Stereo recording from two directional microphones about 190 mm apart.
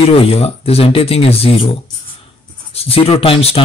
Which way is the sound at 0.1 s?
30° left (ahead or behind).